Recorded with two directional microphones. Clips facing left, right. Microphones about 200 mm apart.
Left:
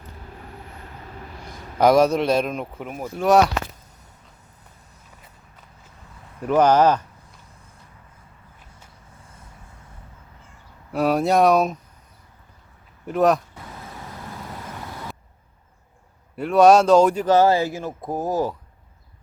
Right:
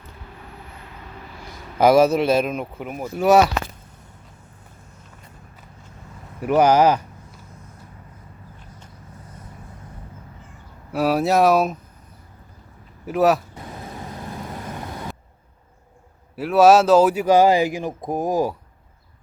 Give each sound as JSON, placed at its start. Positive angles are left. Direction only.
{"t": 1.8, "sound": "speech", "side_deg": -5}
{"t": 6.4, "sound": "speech", "side_deg": -10}
{"t": 10.9, "sound": "speech", "side_deg": 0}
{"t": 13.1, "sound": "speech", "side_deg": -5}
{"t": 13.6, "sound": "vehicle", "side_deg": -20}
{"t": 16.3, "sound": "a man's voice", "side_deg": -5}